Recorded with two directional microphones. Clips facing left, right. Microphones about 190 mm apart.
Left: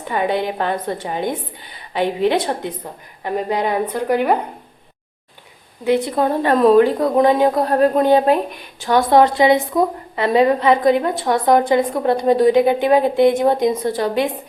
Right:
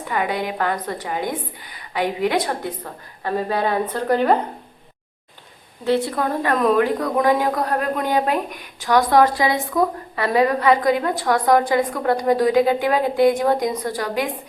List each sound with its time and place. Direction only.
0.1 s a woman's voice: 25° left (ahead or behind)
5.8 s a woman's voice: 15° left (ahead or behind)